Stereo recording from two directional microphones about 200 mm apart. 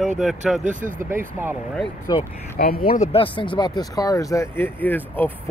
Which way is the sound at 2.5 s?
50° left (ahead or behind).